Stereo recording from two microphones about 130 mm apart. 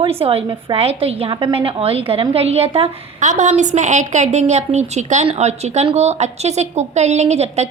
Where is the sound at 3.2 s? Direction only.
70° right (ahead or behind).